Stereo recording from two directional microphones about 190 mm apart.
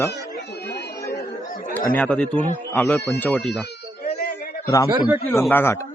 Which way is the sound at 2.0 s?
5° left (ahead or behind).